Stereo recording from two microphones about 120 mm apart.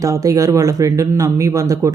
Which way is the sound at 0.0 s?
25° right (ahead or behind).